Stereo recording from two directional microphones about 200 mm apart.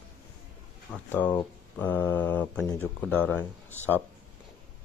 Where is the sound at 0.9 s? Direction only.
5° left (ahead or behind).